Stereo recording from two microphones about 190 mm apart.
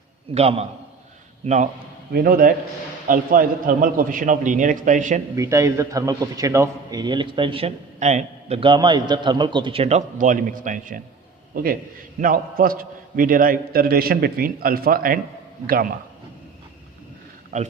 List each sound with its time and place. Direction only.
0.3 s a man's voice: 35° right (ahead or behind)
5.4 s a man's voice: 15° right (ahead or behind); by 15.9 s 50° right (ahead or behind)
17.5 s a man's voice: 40° right (ahead or behind)